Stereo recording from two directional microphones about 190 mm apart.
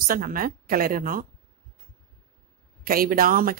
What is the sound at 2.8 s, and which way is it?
Speech, 50° right (ahead or behind).